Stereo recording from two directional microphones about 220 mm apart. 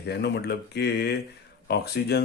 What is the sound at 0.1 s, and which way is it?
Speech, 50° left (ahead or behind).